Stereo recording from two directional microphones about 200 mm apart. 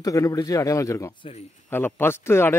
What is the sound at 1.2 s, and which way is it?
Speech, 35° left (ahead or behind).